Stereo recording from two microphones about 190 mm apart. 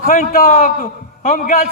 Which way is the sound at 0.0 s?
40° left (ahead or behind).